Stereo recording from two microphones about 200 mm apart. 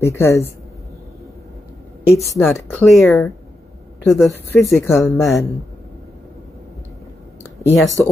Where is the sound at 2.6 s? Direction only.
5° left (ahead or behind).